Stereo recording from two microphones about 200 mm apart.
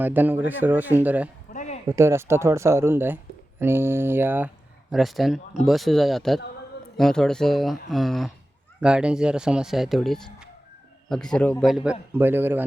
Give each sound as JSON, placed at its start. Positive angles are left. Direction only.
{"t": 0.0, "sound": "speech", "side_deg": -10}
{"t": 1.5, "sound": "a sound", "side_deg": 35}
{"t": 1.9, "sound": "speech", "side_deg": -15}